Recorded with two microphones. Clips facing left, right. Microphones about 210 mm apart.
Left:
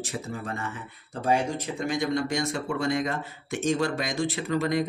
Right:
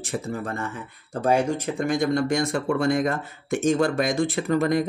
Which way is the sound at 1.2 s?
50° right (ahead or behind).